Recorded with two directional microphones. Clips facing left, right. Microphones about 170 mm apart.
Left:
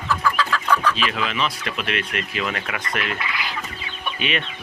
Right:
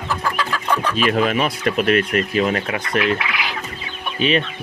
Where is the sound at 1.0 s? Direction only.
45° right (ahead or behind).